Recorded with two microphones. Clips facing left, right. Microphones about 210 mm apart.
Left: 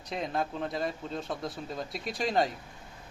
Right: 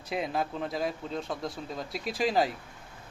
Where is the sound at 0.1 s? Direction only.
5° right (ahead or behind).